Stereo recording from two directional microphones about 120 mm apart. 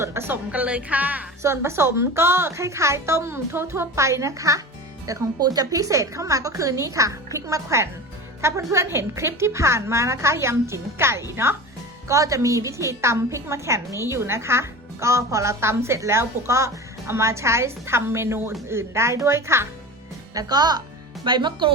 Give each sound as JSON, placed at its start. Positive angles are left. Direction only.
{"t": 0.0, "sound": "a woman's voice", "side_deg": -20}
{"t": 20.3, "sound": "speech", "side_deg": -35}